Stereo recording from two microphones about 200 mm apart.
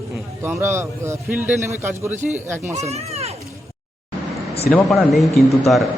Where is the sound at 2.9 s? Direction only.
30° right (ahead or behind).